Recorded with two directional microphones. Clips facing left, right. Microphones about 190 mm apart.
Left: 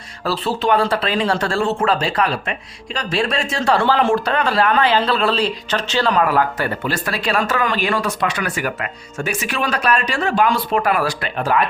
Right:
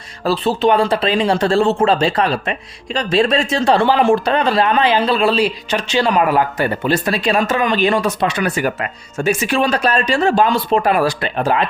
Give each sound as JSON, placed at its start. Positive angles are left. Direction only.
{"t": 0.3, "sound": "speech", "side_deg": -20}